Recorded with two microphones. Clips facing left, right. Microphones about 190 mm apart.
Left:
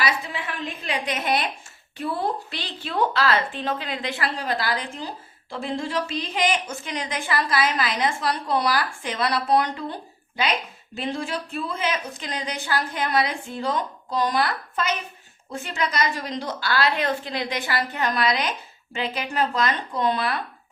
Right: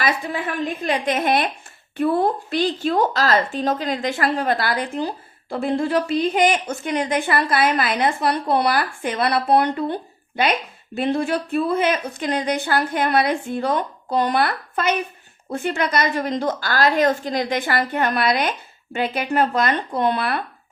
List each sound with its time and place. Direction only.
0.0 s a woman's voice: 50° right (ahead or behind)